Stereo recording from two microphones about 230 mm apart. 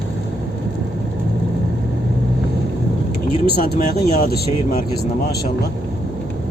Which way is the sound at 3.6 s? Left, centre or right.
Left.